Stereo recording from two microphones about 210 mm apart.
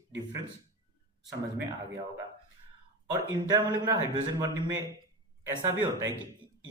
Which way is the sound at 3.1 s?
15° right (ahead or behind).